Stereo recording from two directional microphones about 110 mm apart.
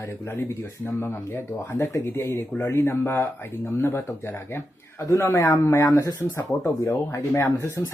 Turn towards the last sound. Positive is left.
turn(degrees=20)  # may be behind; listen again after turning